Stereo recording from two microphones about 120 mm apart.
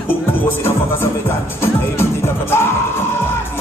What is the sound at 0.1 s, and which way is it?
Music, 20° left (ahead or behind).